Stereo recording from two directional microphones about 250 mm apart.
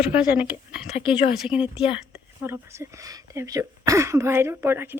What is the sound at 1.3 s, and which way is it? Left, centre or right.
Speech, centre.